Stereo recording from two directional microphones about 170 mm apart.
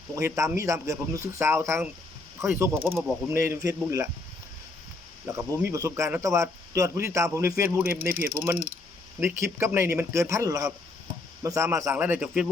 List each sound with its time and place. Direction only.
0.2 s speech: 15° right (ahead or behind)
5.2 s speech: 15° right (ahead or behind)